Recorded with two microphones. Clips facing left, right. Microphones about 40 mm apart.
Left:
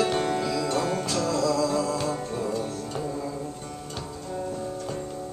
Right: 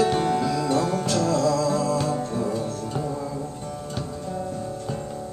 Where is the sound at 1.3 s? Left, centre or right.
Right.